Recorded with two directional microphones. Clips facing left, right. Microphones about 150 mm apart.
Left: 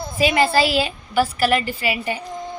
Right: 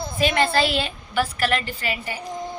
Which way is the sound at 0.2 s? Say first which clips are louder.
Left 3 dB; 5° left (ahead or behind).